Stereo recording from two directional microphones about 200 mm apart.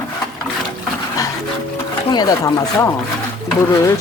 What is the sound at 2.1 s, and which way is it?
Speech, 20° left (ahead or behind).